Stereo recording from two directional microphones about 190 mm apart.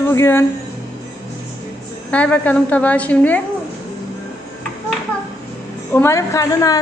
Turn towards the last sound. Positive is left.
turn(degrees=20)  # may be behind; listen again after turning